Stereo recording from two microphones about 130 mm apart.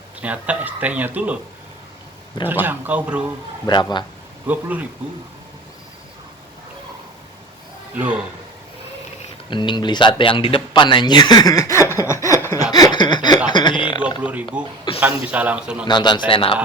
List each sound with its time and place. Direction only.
0.2 s speech: 10° right (ahead or behind)
2.5 s speech: 15° right (ahead or behind)
3.7 s speech: 35° left (ahead or behind)
4.4 s speech: 10° right (ahead or behind)
7.9 s speech: 10° right (ahead or behind)
9.5 s speech: 35° left (ahead or behind); by 12.6 s 20° left (ahead or behind)
12.7 s a sound: 30° left (ahead or behind)
13.5 s chuckle: 35° left (ahead or behind)
14.2 s speech: 10° right (ahead or behind)
15.9 s speech: 35° left (ahead or behind)